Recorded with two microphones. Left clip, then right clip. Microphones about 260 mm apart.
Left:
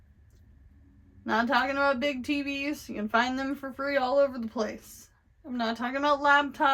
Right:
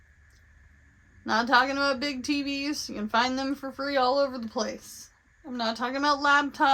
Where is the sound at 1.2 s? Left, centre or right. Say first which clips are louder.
Right 3 dB; right.